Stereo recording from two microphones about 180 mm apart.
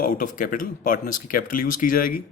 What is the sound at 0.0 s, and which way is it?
Speech, 45° left (ahead or behind).